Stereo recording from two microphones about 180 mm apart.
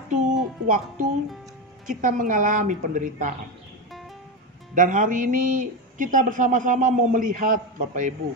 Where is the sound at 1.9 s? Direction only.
45° right (ahead or behind).